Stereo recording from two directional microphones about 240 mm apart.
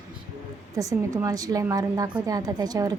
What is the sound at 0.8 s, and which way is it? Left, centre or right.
A woman's voice, centre.